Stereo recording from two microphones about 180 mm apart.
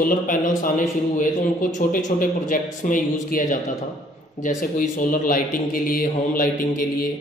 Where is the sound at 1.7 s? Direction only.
45° left (ahead or behind).